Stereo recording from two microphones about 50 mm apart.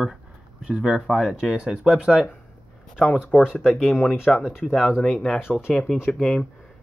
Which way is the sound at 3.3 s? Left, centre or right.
Left.